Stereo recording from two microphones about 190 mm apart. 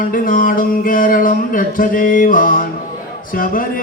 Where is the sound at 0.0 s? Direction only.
45° left (ahead or behind).